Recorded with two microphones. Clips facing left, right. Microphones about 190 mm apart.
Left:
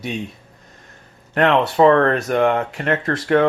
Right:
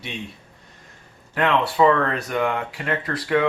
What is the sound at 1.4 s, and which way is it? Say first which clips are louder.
Speech: left 4 dB; 45° left (ahead or behind).